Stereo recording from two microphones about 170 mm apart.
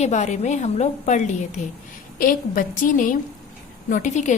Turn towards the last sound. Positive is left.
turn(degrees=45)  # may be behind; listen again after turning